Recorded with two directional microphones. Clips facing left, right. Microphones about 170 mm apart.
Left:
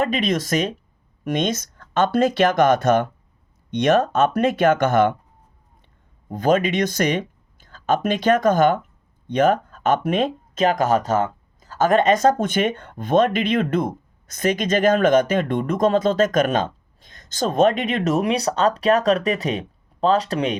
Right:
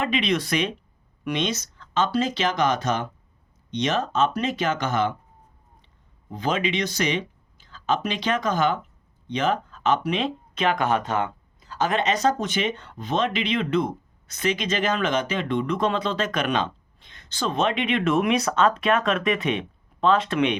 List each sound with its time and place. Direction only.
0.0 s speech: 45° left (ahead or behind)